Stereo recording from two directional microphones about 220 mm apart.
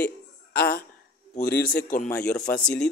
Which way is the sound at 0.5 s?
45° left (ahead or behind).